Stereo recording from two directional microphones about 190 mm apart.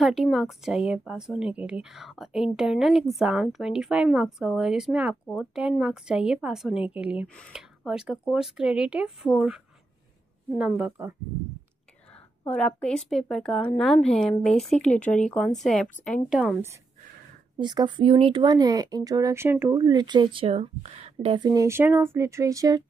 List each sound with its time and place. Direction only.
0.0 s a woman's voice: centre (ahead or behind)
7.3 s a woman's voice: 5° left (ahead or behind)
12.4 s a woman's voice: 5° left (ahead or behind)
17.6 s speech: 25° right (ahead or behind)